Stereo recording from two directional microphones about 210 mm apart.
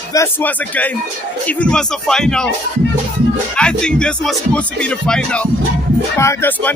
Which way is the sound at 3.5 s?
5° left (ahead or behind).